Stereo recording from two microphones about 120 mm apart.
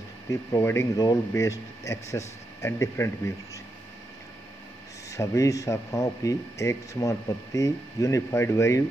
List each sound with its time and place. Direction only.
0.3 s speech: 25° left (ahead or behind)
5.1 s speech: 25° left (ahead or behind)